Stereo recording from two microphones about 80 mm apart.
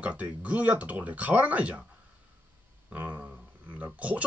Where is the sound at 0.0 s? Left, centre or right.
Centre.